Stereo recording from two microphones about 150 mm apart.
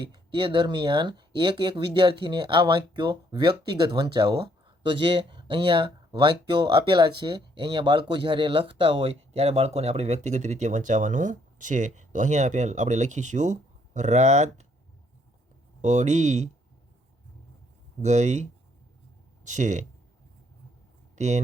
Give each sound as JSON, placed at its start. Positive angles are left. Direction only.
{"t": 0.0, "sound": "speech", "side_deg": -30}
{"t": 15.8, "sound": "speech", "side_deg": -50}
{"t": 18.0, "sound": "speech", "side_deg": -50}
{"t": 19.5, "sound": "speech", "side_deg": -55}
{"t": 21.2, "sound": "speech", "side_deg": -50}